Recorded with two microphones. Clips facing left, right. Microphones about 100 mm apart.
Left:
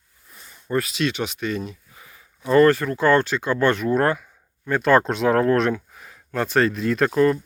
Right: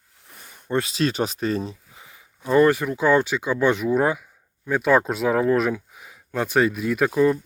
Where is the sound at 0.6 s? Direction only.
25° right (ahead or behind).